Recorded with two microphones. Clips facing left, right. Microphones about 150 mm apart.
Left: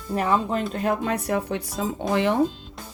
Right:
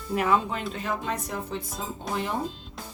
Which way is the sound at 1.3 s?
70° left (ahead or behind).